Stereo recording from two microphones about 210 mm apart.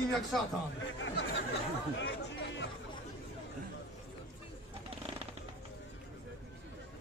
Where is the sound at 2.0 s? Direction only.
55° left (ahead or behind).